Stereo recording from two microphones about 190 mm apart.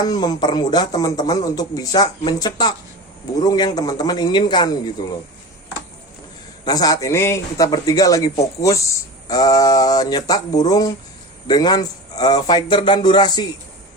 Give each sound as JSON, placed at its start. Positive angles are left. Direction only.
{"t": 0.0, "sound": "speech", "side_deg": 20}
{"t": 6.7, "sound": "speech", "side_deg": 20}